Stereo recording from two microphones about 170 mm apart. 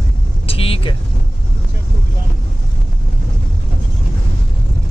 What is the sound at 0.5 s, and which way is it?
Vehicle, 35° left (ahead or behind).